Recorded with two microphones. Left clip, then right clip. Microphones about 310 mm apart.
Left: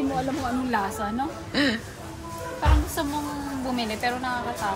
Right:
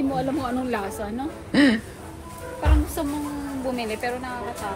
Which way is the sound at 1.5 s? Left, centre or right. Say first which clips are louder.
Right 6 dB; right.